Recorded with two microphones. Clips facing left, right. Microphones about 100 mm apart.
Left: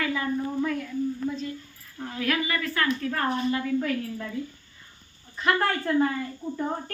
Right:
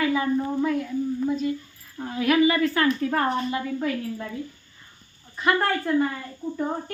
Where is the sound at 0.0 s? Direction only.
20° right (ahead or behind).